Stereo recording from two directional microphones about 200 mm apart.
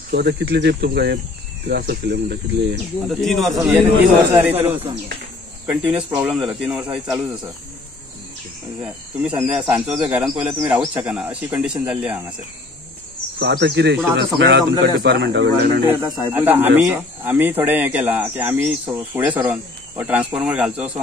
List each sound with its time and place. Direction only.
0.1 s speech: 50° right (ahead or behind)
3.1 s speech: centre (ahead or behind)
9.2 s speech: 5° right (ahead or behind)
13.4 s speech: 60° right (ahead or behind)
15.9 s speech: 10° right (ahead or behind)